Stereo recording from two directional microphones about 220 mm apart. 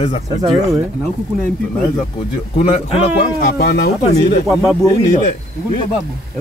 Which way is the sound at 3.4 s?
45° left (ahead or behind).